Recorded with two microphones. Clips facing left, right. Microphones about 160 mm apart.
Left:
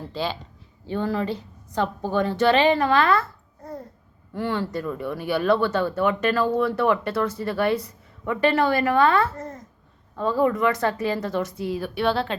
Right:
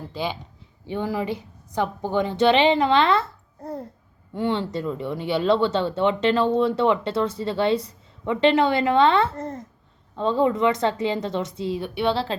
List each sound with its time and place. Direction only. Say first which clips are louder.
0.1 s a woman's voice: even; 15° right (ahead or behind)